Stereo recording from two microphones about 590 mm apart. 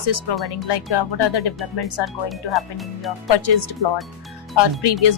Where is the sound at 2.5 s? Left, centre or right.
Centre.